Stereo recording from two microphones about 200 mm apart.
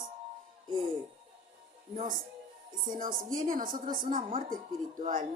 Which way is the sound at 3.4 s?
40° right (ahead or behind).